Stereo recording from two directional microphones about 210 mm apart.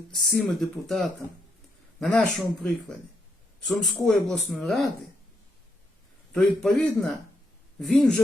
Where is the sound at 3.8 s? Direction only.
Centre (ahead or behind).